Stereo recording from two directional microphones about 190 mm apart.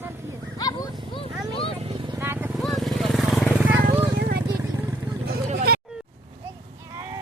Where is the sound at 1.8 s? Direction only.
30° right (ahead or behind).